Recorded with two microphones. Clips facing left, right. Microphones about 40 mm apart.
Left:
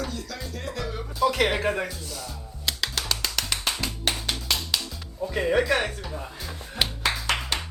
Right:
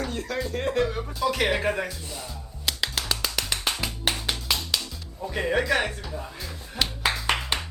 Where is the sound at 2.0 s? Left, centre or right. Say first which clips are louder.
Even; right.